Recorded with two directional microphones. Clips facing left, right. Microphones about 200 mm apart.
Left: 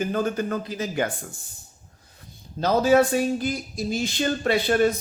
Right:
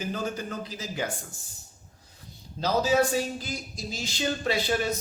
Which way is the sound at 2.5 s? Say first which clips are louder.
Left 5 dB; 55° left (ahead or behind).